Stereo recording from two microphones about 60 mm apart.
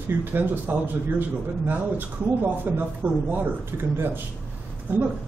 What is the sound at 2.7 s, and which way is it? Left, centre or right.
Speech, right.